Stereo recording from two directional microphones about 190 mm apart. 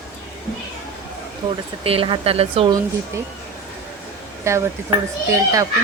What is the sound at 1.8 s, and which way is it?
Speech, 30° right (ahead or behind).